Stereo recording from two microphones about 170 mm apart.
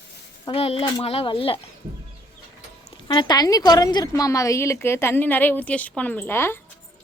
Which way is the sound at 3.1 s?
25° left (ahead or behind).